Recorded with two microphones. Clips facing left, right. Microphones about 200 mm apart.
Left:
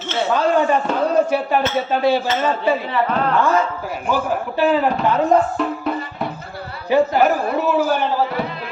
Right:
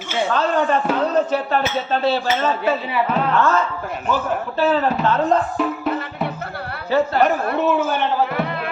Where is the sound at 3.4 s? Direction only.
15° left (ahead or behind).